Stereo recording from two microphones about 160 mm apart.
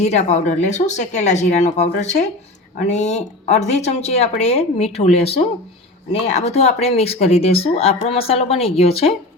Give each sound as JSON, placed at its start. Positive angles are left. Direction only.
{"t": 0.0, "sound": "speech", "side_deg": 45}